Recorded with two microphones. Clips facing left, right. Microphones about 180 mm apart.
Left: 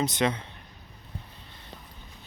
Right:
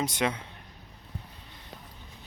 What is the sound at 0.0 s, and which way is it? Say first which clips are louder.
Speech: left 3 dB; 10° right (ahead or behind).